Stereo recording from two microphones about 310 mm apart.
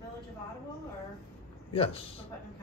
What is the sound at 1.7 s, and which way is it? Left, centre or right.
Speech, centre.